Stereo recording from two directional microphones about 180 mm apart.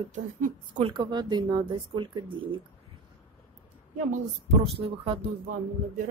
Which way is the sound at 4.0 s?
35° right (ahead or behind).